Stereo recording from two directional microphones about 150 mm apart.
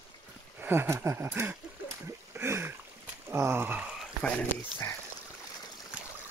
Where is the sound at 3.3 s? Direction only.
15° right (ahead or behind).